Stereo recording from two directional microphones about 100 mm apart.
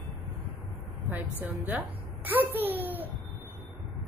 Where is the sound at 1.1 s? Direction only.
20° right (ahead or behind).